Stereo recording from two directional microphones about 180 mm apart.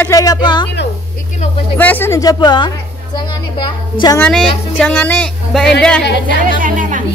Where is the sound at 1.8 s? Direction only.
10° left (ahead or behind).